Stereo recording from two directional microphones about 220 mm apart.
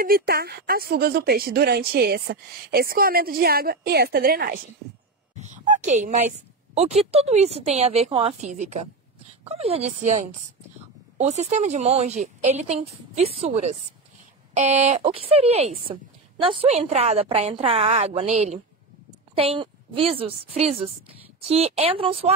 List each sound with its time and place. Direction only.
0.0 s speech: 45° right (ahead or behind)
5.4 s a woman's voice: 35° right (ahead or behind)